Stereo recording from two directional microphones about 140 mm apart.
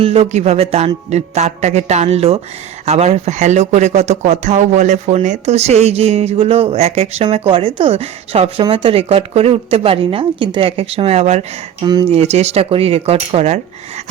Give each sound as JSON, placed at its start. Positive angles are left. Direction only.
{"t": 0.0, "sound": "speech", "side_deg": -40}